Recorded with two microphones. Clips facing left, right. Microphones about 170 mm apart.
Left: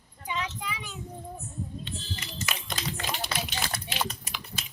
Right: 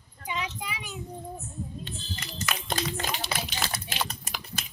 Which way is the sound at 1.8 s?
45° right (ahead or behind).